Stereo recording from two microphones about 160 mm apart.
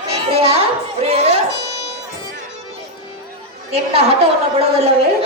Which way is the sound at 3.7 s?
40° right (ahead or behind).